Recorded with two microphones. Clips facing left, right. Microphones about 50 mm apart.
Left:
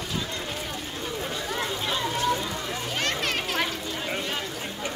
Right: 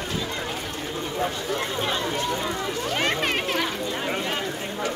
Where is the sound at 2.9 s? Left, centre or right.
Centre.